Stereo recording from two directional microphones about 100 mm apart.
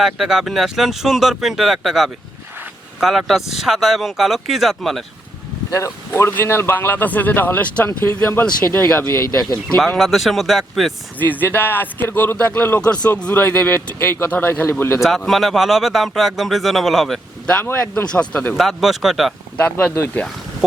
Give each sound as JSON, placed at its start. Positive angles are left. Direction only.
{"t": 0.0, "sound": "speech", "side_deg": -5}
{"t": 5.7, "sound": "speech", "side_deg": 30}
{"t": 9.6, "sound": "speech", "side_deg": 5}
{"t": 11.2, "sound": "speech", "side_deg": 20}
{"t": 13.3, "sound": "speech", "side_deg": 20}
{"t": 15.0, "sound": "speech", "side_deg": 0}
{"t": 17.4, "sound": "speech", "side_deg": 10}
{"t": 18.5, "sound": "speech", "side_deg": 0}